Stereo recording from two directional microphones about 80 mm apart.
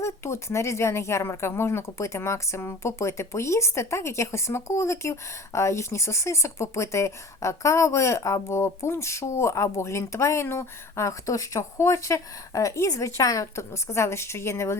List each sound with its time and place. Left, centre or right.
0.0 s speech: left